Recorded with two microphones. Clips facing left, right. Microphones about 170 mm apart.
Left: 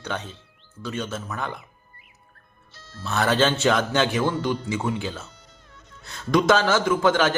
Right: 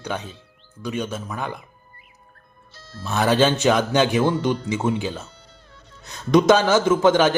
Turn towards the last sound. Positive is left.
turn(degrees=-20)  # may be behind; listen again after turning